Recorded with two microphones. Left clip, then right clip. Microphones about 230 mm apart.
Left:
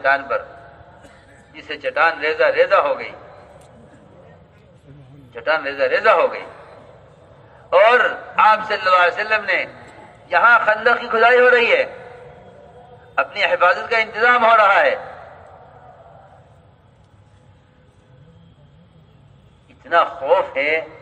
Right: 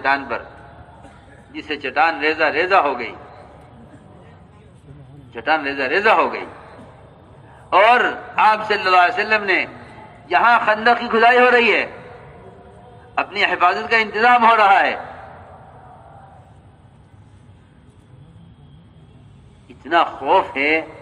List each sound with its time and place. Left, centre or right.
0.0 s a man's voice: right
1.5 s a man's voice: right
5.3 s a man's voice: right
7.7 s a man's voice: right
13.1 s a man's voice: right
19.8 s a man's voice: right